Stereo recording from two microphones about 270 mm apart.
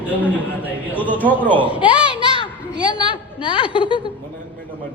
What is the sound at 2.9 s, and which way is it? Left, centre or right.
A woman's voice, centre.